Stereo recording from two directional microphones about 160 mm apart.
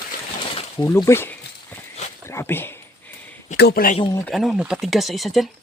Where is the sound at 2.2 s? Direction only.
15° left (ahead or behind).